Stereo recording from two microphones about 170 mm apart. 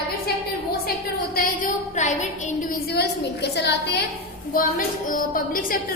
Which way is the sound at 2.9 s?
75° left (ahead or behind).